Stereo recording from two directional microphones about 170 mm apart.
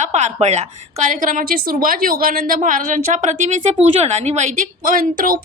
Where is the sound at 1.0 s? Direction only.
50° right (ahead or behind).